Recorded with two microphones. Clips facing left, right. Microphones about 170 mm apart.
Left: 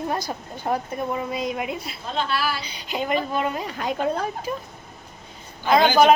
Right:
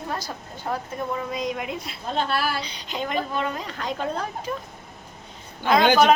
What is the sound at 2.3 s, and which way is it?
Speech, 55° right (ahead or behind).